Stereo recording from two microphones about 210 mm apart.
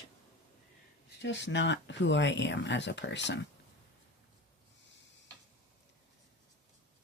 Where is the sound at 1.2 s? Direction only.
55° left (ahead or behind).